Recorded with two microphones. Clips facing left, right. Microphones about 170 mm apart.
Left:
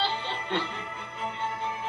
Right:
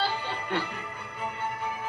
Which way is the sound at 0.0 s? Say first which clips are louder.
Even; 25° left (ahead or behind).